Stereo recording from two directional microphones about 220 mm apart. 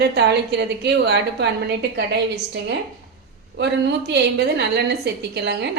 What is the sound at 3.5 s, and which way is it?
A woman's voice, 50° right (ahead or behind).